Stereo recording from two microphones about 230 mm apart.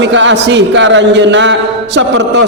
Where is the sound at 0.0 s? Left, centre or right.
Right.